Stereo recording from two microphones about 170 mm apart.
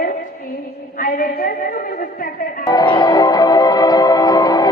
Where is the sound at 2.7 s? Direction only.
25° left (ahead or behind).